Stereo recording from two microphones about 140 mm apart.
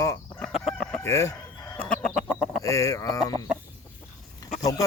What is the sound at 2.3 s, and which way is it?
Chicken, 5° right (ahead or behind).